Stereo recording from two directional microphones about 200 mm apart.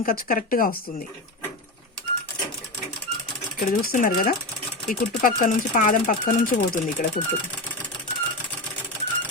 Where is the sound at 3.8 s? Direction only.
40° left (ahead or behind).